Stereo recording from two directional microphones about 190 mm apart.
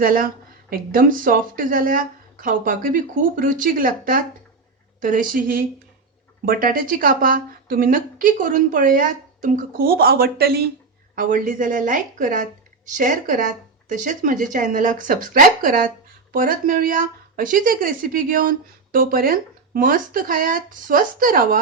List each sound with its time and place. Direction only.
0.0 s speech: 50° right (ahead or behind)